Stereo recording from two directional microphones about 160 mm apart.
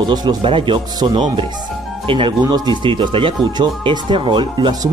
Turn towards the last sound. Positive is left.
turn(degrees=-25)  # may be behind; listen again after turning